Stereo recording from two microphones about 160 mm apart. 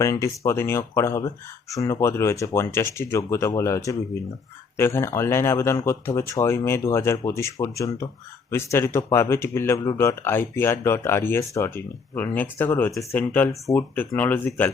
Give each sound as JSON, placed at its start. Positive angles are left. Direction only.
{"t": 0.0, "sound": "speech", "side_deg": 20}